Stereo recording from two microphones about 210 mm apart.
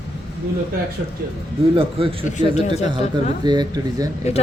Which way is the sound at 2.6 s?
30° left (ahead or behind).